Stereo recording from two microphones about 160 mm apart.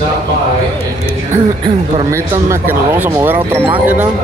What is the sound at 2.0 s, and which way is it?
Speech, 20° right (ahead or behind).